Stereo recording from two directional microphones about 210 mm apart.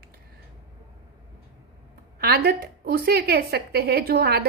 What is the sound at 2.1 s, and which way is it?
Speech, 45° right (ahead or behind).